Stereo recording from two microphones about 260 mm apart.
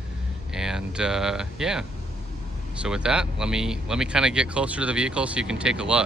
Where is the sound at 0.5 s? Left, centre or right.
Centre.